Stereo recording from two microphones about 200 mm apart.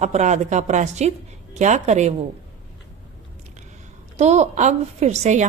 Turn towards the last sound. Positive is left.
turn(degrees=-35)  # may be behind; listen again after turning